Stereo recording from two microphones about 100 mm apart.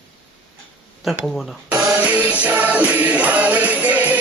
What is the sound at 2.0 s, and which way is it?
Music, 15° right (ahead or behind).